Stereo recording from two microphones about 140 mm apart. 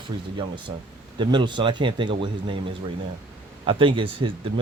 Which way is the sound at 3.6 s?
40° right (ahead or behind).